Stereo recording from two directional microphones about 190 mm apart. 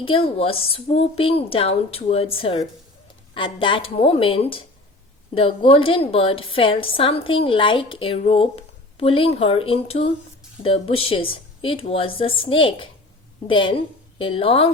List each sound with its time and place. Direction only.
0.0 s a woman's voice: 30° left (ahead or behind)